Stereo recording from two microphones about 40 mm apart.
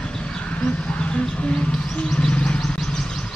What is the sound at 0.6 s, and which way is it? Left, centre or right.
Bird, left.